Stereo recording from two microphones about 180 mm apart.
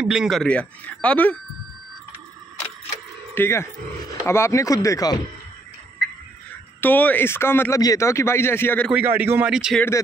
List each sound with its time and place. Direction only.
0.0 s speech: 5° right (ahead or behind)
3.3 s speech: 15° left (ahead or behind)
6.8 s speech: 10° left (ahead or behind)
8.9 s speech: 10° right (ahead or behind)